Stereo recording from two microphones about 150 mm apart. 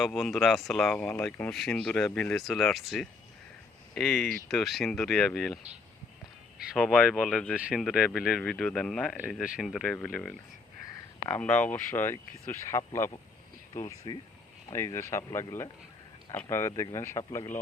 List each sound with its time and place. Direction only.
0.0 s speech: centre (ahead or behind)
6.7 s speech: 5° left (ahead or behind)
7.5 s speech: 5° right (ahead or behind); by 17.6 s 20° left (ahead or behind)